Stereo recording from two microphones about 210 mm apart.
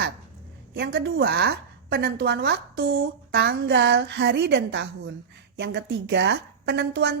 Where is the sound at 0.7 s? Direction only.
50° right (ahead or behind).